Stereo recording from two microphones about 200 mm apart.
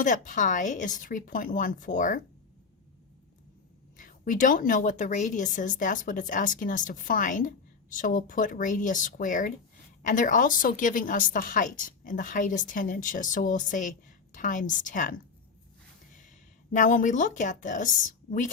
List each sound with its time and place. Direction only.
0.0 s a woman's voice: 40° left (ahead or behind)
3.9 s a woman's voice: 40° left (ahead or behind)
16.7 s a woman's voice: 40° left (ahead or behind)